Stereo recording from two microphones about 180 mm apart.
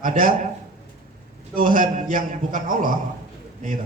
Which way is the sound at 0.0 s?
50° right (ahead or behind).